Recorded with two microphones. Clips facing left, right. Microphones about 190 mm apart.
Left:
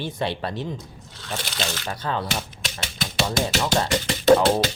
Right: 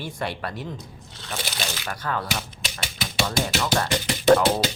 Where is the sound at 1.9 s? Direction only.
25° left (ahead or behind).